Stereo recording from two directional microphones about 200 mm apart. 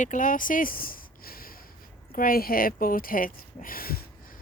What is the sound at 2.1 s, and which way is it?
Speech, 45° left (ahead or behind).